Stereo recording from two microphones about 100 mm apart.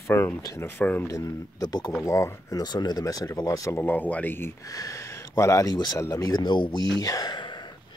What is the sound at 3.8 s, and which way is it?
Speech, 15° left (ahead or behind).